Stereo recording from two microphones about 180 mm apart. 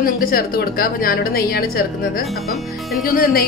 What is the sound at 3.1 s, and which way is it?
Speech, 55° left (ahead or behind).